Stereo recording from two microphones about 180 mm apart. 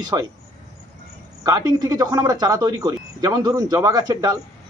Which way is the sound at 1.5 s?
20° right (ahead or behind).